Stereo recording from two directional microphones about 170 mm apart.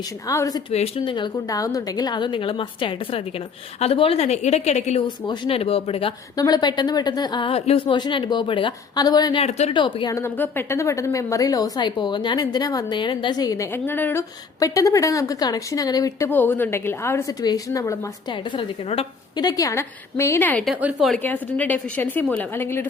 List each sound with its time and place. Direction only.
0.3 s a woman's voice: 20° left (ahead or behind)
0.7 s a woman's voice: 35° left (ahead or behind)
5.0 s a woman's voice: 30° left (ahead or behind)
6.3 s a woman's voice: 25° left (ahead or behind)
9.4 s a woman's voice: 40° left (ahead or behind)
9.7 s a woman's voice: 30° left (ahead or behind)
19.4 s a woman's voice: 20° left (ahead or behind); by 21.2 s centre (ahead or behind)
21.2 s a woman's voice: 10° left (ahead or behind)